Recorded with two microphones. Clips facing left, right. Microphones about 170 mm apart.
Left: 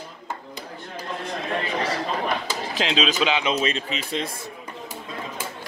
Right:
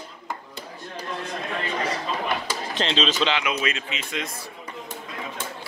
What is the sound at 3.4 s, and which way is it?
Speech, 30° left (ahead or behind).